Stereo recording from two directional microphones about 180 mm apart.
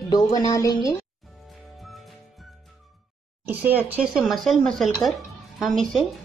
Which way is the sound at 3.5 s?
10° right (ahead or behind).